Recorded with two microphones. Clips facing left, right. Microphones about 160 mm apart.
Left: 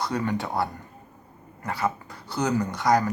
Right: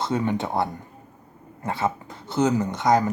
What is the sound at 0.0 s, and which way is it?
Speech, 20° right (ahead or behind).